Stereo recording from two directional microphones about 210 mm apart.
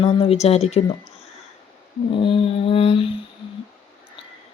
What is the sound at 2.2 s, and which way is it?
Speech, 25° left (ahead or behind).